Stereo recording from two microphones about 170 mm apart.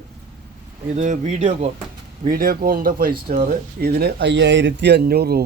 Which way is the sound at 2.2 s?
60° right (ahead or behind).